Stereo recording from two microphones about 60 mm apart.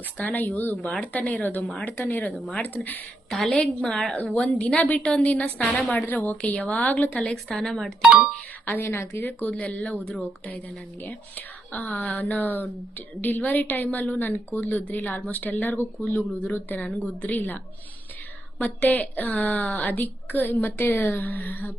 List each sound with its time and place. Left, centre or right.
0.2 s a woman's voice: left
1.6 s a woman's voice: centre
2.0 s a woman's voice: left
3.2 s a woman's voice: centre
4.4 s a woman's voice: left
7.5 s a woman's voice: centre
8.6 s a woman's voice: left
9.6 s a woman's voice: left
18.6 s a woman's voice: left